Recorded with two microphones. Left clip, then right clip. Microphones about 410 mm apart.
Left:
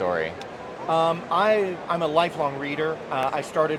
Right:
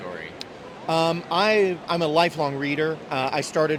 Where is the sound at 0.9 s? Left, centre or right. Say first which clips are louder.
Left 1 dB; right.